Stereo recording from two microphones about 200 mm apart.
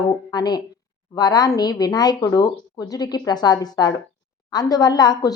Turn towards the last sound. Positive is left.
turn(degrees=20)  # may be behind; listen again after turning